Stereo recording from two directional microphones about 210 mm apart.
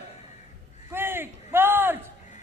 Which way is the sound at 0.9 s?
10° right (ahead or behind).